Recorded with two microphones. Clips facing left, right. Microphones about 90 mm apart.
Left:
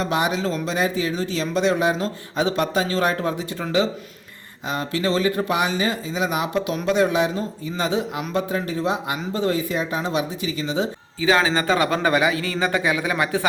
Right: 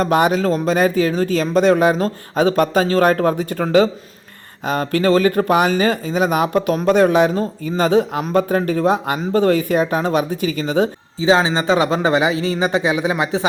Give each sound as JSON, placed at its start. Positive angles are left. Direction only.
{"t": 0.0, "sound": "speech", "side_deg": -50}
{"t": 11.2, "sound": "a man's voice", "side_deg": -25}